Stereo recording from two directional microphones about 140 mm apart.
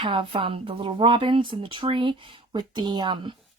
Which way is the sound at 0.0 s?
35° right (ahead or behind).